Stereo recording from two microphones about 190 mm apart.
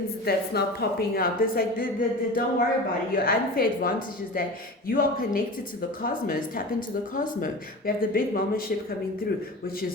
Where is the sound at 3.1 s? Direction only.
50° left (ahead or behind).